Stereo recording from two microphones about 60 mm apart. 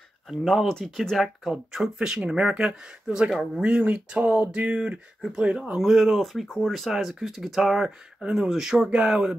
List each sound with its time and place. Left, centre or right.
0.3 s speech: centre
3.6 s speech: right